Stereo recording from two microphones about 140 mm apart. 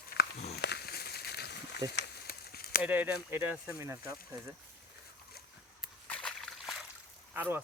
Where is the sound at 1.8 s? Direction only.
30° right (ahead or behind).